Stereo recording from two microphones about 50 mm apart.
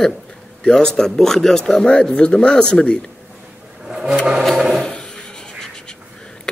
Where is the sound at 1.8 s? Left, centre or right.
Left.